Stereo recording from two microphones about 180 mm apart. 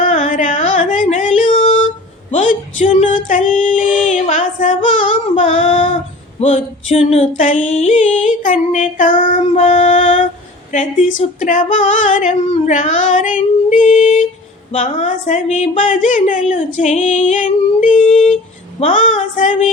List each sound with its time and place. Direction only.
0.0 s music: 45° left (ahead or behind)
2.3 s a sound: 45° left (ahead or behind)
6.4 s speech: 35° left (ahead or behind)
7.7 s female singing: 40° left (ahead or behind)
11.3 s female singing: 45° left (ahead or behind)
14.7 s speech: 40° left (ahead or behind)
16.7 s female singing: 40° left (ahead or behind)